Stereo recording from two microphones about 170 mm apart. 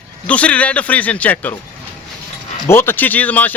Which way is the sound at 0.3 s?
10° left (ahead or behind).